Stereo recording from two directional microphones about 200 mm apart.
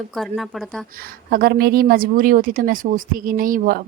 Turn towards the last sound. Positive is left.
turn(degrees=-45)  # may be behind; listen again after turning